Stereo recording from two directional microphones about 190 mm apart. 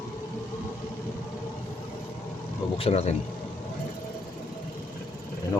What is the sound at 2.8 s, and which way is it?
Speech, 35° left (ahead or behind).